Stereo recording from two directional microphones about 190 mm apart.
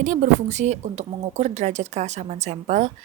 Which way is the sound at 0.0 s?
40° right (ahead or behind).